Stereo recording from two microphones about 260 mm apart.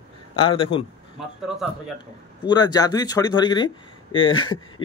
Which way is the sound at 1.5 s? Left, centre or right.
Centre.